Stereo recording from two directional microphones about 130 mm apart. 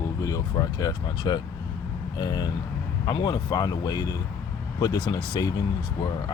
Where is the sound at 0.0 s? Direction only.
25° left (ahead or behind).